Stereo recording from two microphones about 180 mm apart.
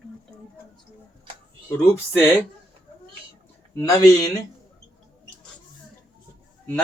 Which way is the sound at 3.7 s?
20° left (ahead or behind).